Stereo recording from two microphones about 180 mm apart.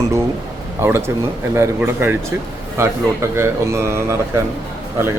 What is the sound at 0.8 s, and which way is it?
Speech, 15° right (ahead or behind).